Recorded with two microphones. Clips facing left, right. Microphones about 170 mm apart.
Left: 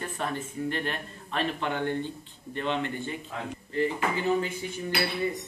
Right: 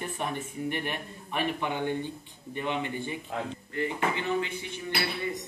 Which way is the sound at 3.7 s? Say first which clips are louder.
Left 3 dB; 35° left (ahead or behind).